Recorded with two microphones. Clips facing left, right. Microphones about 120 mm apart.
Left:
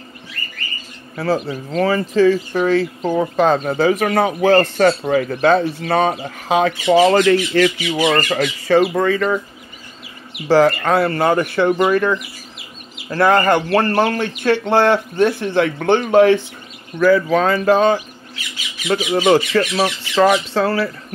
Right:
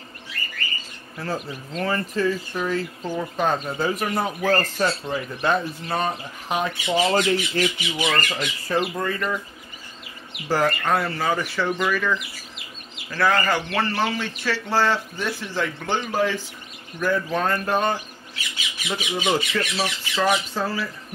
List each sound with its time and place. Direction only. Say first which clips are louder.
1.1 s speech: left 10 dB; 75° left (ahead or behind)
8.3 s speech: left 10 dB; 75° left (ahead or behind)
10.5 s a man's voice: left 8 dB; 90° left; by 16.4 s 65° left (ahead or behind)
17.0 s speech: left 9 dB; 90° left; by 20.9 s 75° left (ahead or behind)